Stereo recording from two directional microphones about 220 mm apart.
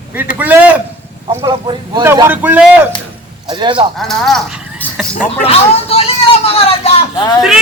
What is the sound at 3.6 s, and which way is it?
Speech, 20° right (ahead or behind).